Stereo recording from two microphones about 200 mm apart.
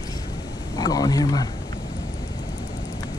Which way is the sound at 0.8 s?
20° left (ahead or behind).